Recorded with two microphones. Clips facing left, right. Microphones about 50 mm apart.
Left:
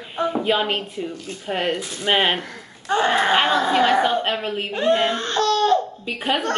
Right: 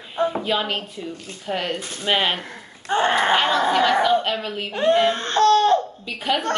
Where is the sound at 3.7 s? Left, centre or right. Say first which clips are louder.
Right 1 dB; left.